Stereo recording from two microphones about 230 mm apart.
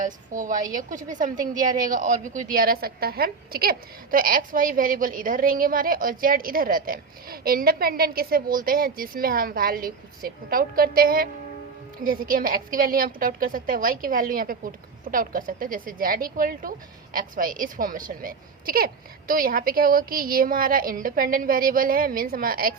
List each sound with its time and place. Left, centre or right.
0.0 s a woman's voice: right